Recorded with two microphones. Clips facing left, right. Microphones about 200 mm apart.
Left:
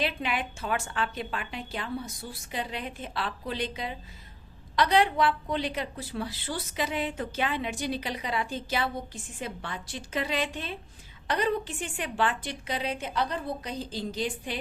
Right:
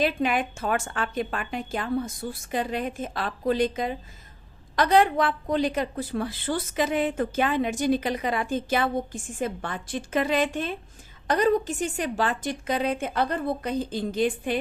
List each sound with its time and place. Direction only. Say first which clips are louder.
0.0 s a woman's voice: right 6 dB; 45° right (ahead or behind)